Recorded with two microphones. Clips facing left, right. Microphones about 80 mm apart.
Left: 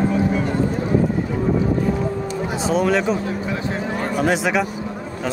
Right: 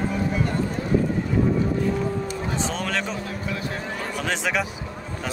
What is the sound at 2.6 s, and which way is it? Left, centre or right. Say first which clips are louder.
Speech: left 11 dB; centre.